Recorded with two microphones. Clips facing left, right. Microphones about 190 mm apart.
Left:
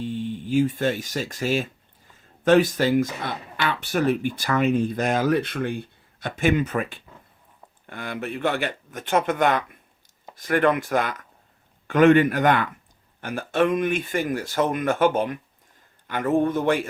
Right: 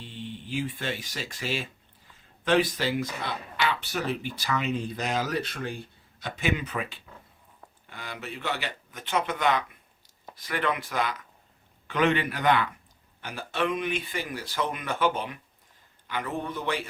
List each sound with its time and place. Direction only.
0.0 s speech: 45° left (ahead or behind)